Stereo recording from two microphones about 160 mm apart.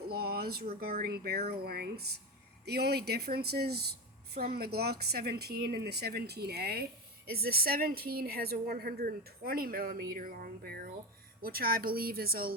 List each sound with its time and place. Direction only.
0.1 s a sound: 75° right (ahead or behind)
0.8 s a woman's voice: 70° right (ahead or behind)
2.6 s a woman's voice: 90° right; by 12.5 s 70° right (ahead or behind)